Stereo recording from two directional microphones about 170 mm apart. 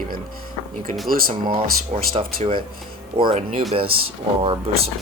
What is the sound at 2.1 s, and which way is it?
Speech, 35° right (ahead or behind).